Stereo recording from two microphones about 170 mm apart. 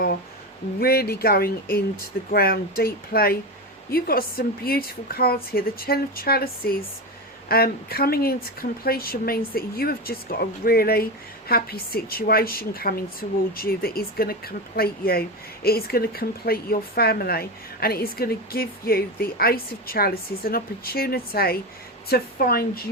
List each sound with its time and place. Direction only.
0.8 s speech: 65° left (ahead or behind)